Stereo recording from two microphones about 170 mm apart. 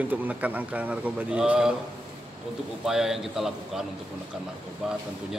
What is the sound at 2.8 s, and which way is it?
Speech, centre (ahead or behind).